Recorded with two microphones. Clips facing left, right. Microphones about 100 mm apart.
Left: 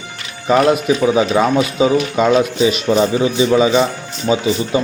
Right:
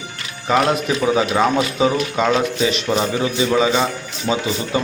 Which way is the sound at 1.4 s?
15° left (ahead or behind).